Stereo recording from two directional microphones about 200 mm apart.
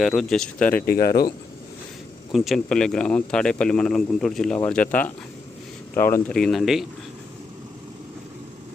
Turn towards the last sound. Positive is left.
turn(degrees=0)  # may be behind; listen again after turning